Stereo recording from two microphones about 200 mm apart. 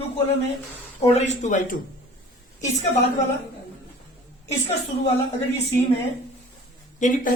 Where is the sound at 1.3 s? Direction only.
35° left (ahead or behind).